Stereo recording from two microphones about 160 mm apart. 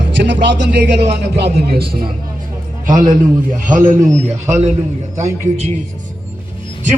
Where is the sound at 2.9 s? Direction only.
50° right (ahead or behind).